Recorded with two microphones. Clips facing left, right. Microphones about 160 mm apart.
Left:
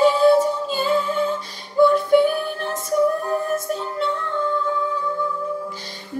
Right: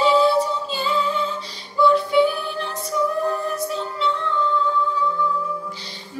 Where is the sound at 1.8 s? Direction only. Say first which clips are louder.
Left 2 dB; 50° left (ahead or behind).